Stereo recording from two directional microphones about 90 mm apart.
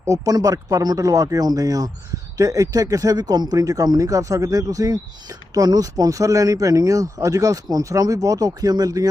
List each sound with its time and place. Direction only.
0.0 s speech: 40° right (ahead or behind)